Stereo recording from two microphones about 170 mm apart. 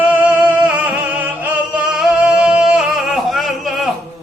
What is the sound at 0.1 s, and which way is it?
Music, 10° right (ahead or behind).